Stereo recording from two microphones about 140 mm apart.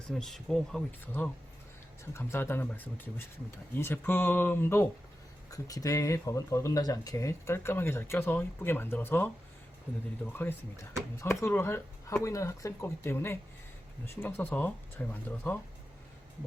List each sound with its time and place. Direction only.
0.1 s speech: 5° left (ahead or behind)
0.9 s speech: 15° left (ahead or behind)
11.2 s speech: 20° left (ahead or behind)